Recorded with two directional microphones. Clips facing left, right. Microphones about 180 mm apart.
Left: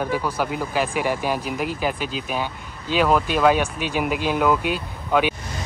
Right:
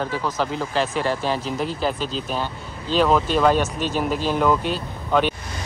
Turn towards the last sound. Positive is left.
turn(degrees=10)  # may be behind; listen again after turning